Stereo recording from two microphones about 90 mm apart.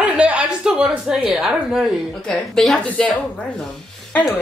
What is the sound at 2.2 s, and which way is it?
Speech, 5° left (ahead or behind).